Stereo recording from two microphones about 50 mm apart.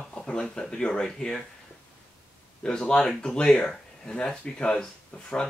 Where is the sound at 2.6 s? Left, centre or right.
Centre.